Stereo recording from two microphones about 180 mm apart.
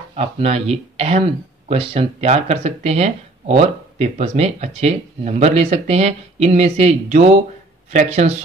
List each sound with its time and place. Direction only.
0.1 s speech: 35° right (ahead or behind)